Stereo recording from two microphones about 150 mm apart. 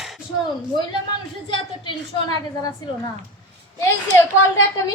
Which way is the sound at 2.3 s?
25° left (ahead or behind).